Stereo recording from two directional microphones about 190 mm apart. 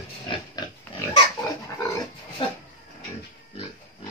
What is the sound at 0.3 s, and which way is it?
Pig, 20° left (ahead or behind).